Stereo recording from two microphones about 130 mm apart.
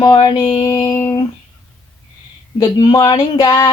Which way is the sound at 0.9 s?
20° left (ahead or behind).